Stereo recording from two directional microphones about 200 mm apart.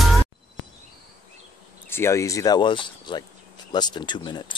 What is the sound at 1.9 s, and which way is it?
Speech, 15° left (ahead or behind).